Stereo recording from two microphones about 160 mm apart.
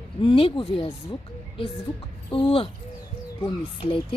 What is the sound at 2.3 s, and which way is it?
Speech, 35° left (ahead or behind).